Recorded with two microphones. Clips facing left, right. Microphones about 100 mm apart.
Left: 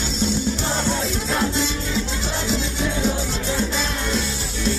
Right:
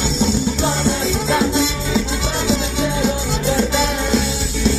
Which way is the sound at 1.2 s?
90° right.